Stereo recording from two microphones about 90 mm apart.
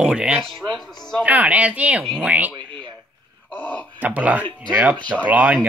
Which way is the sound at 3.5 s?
15° left (ahead or behind).